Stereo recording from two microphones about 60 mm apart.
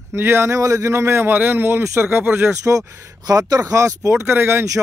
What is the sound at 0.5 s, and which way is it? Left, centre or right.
A man's voice, right.